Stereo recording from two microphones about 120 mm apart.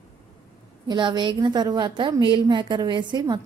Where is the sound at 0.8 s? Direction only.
40° right (ahead or behind).